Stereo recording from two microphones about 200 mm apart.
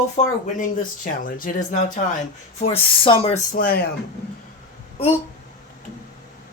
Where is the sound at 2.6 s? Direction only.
25° left (ahead or behind).